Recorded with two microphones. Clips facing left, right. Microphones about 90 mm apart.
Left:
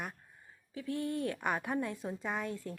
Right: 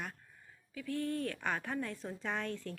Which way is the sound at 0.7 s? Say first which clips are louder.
Left 1 dB; 25° left (ahead or behind).